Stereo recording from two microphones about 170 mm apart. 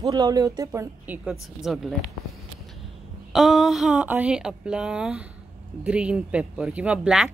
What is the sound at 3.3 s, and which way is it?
A man's voice, centre (ahead or behind).